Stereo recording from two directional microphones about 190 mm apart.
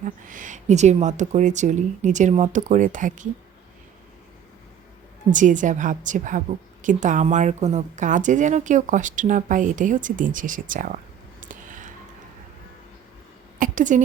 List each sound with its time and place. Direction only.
0.0 s speech: 45° right (ahead or behind)
5.3 s speech: 40° right (ahead or behind)
13.6 s a woman's voice: 40° right (ahead or behind)